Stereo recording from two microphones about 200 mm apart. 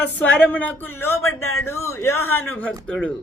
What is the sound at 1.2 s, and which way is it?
Speech, 90° left.